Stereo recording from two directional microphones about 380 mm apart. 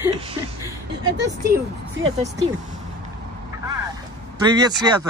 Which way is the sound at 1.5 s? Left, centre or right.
Centre.